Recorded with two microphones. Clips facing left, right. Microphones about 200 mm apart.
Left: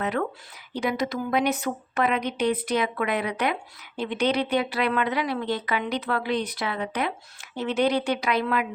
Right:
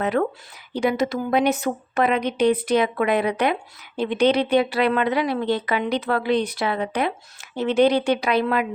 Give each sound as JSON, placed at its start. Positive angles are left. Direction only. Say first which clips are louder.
{"t": 0.0, "sound": "speech", "louder": "right 5 dB", "side_deg": -35}